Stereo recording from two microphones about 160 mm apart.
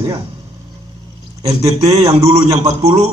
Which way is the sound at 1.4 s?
40° right (ahead or behind).